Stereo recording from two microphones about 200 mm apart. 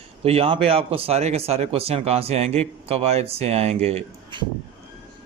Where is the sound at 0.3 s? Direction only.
30° right (ahead or behind).